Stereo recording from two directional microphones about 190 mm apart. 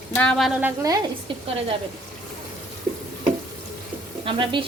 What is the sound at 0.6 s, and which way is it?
Speech, 15° right (ahead or behind).